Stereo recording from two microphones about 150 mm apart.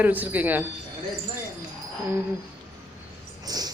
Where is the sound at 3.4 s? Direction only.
25° right (ahead or behind).